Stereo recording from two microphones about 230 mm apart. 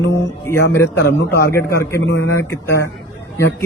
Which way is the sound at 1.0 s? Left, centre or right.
Left.